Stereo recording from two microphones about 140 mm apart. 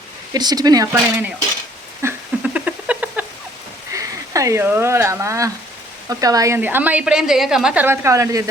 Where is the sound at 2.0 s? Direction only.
20° right (ahead or behind).